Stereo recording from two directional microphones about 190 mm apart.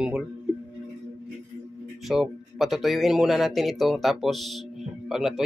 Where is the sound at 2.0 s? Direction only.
Centre (ahead or behind).